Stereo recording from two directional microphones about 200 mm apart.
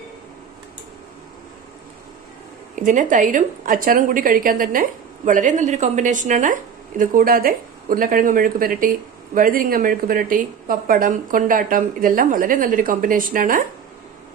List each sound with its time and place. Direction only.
2.7 s a woman's voice: 40° right (ahead or behind)